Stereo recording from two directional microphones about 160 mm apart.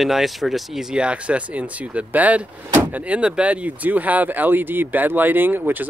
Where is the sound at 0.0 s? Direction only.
Centre (ahead or behind).